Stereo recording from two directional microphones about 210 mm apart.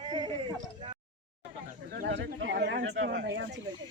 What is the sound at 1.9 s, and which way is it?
Speech, 55° right (ahead or behind).